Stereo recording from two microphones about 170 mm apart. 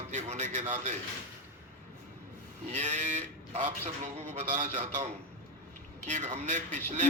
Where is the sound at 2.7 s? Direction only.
45° right (ahead or behind).